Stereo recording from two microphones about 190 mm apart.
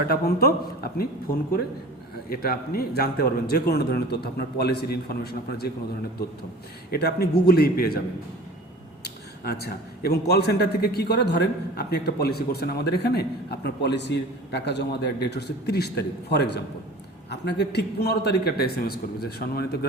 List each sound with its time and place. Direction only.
0.1 s a man's voice: 55° left (ahead or behind)
2.3 s a man's voice: 55° left (ahead or behind)
6.9 s a man's voice: 55° left (ahead or behind)
9.0 s a man's voice: 55° left (ahead or behind)